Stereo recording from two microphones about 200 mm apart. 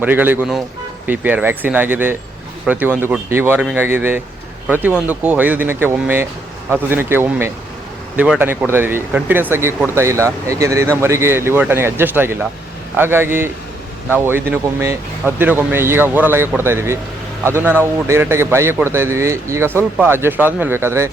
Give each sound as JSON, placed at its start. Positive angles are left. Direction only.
{"t": 0.0, "sound": "speech", "side_deg": -10}